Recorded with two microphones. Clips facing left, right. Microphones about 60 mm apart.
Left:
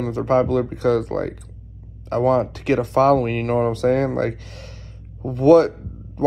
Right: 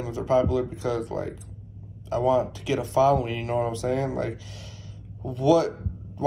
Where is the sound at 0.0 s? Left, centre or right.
Left.